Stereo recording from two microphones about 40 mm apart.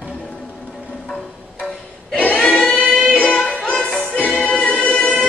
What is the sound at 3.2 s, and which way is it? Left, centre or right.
Music, left.